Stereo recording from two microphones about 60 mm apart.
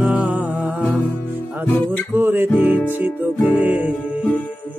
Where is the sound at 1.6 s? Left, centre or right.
Left.